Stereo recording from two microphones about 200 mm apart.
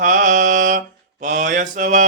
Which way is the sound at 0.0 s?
40° right (ahead or behind).